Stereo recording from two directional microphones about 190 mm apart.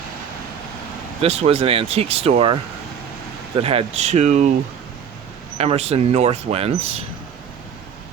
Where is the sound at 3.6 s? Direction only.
30° right (ahead or behind).